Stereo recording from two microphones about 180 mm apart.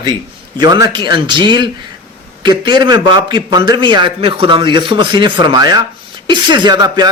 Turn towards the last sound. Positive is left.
turn(degrees=-20)  # may be behind; listen again after turning